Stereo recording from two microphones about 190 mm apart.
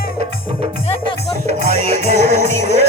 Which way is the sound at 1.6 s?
55° left (ahead or behind).